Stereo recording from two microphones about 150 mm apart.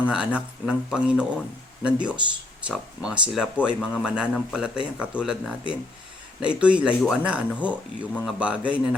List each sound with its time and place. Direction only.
0.0 s speech: 5° right (ahead or behind)